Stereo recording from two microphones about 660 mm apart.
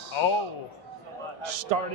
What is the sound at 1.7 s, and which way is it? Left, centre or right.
Speech, right.